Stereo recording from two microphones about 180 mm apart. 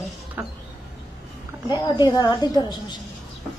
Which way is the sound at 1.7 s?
20° left (ahead or behind).